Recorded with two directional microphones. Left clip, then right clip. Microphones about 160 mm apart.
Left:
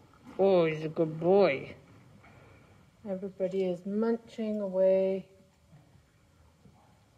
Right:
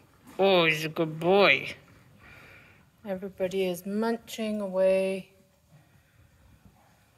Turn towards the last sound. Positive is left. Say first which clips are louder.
# right 1 dB
turn(degrees=-20)  # may be behind; listen again after turning